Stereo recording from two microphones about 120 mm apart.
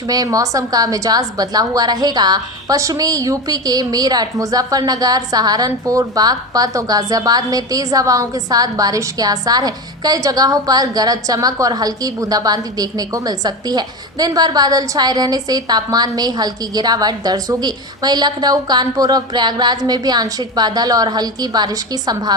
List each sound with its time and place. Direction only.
0.1 s a woman's voice: 30° right (ahead or behind)